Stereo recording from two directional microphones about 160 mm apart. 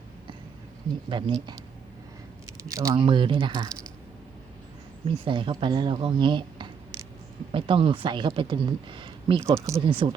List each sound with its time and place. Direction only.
1.1 s speech: 25° right (ahead or behind)
2.6 s speech: 20° right (ahead or behind)
3.0 s speech: 30° right (ahead or behind)
5.0 s speech: 35° right (ahead or behind)
9.4 s speech: 20° right (ahead or behind)
10.0 s speech: 35° right (ahead or behind)